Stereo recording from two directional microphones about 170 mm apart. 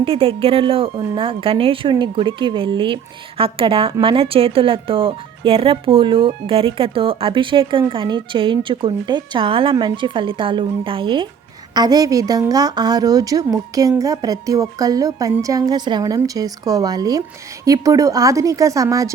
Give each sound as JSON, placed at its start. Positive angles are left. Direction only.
{"t": 0.0, "sound": "a woman's voice", "side_deg": -35}